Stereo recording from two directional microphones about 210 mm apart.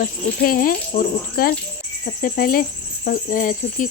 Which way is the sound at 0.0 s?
40° left (ahead or behind).